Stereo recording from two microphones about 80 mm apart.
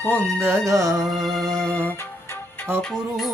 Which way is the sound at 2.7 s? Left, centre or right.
Right.